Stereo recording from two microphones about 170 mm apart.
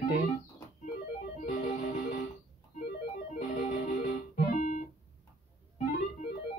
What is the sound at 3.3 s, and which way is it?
Music, 45° left (ahead or behind).